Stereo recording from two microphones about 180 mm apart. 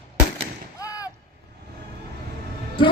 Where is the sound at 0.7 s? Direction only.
20° left (ahead or behind).